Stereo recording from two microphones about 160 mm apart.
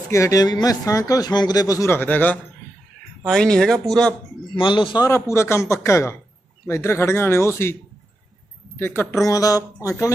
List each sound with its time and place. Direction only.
0.1 s speech: 20° left (ahead or behind); by 4.1 s 5° left (ahead or behind)
4.6 s a man's voice: 30° left (ahead or behind); by 7.7 s 15° left (ahead or behind)
8.7 s a woman's voice: 15° left (ahead or behind)